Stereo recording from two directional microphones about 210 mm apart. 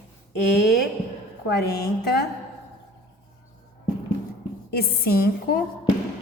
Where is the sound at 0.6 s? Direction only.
50° left (ahead or behind).